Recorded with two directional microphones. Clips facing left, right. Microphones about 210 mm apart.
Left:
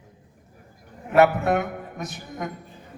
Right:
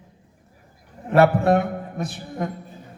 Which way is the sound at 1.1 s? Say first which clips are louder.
Right 2 dB; 30° right (ahead or behind).